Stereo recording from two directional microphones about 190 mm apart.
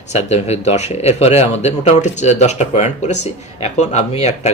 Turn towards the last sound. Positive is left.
turn(degrees=35)  # may be behind; listen again after turning